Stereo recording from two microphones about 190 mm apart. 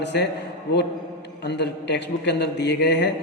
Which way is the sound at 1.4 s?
65° left (ahead or behind).